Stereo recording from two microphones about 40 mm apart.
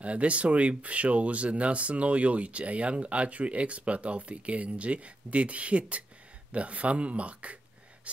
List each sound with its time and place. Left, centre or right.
0.0 s speech: right